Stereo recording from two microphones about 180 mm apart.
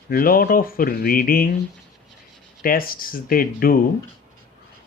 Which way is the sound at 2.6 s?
55° left (ahead or behind).